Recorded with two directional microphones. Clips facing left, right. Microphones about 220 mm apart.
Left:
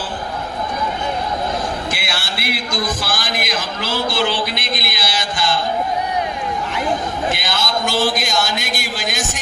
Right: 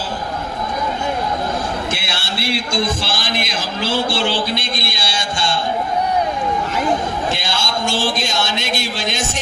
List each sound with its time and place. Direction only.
1.9 s a man's voice: 25° right (ahead or behind)
7.3 s a man's voice: 25° right (ahead or behind)